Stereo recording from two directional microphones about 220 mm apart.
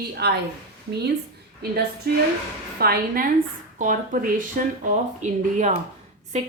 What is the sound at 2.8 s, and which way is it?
A woman's voice, 40° right (ahead or behind).